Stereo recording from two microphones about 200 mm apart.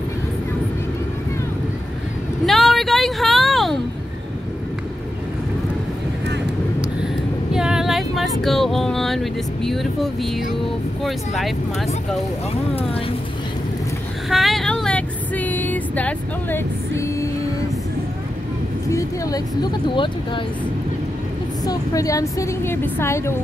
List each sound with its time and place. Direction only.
2.4 s a sound: centre (ahead or behind)
7.5 s a sound: 5° right (ahead or behind)
11.1 s speech: centre (ahead or behind)
14.3 s vehicle: centre (ahead or behind)
18.9 s a woman's voice: 15° left (ahead or behind)
21.6 s a woman's voice: 15° left (ahead or behind)